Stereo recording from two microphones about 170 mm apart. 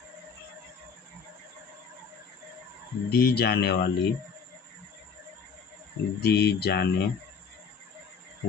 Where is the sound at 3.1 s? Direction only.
70° left (ahead or behind).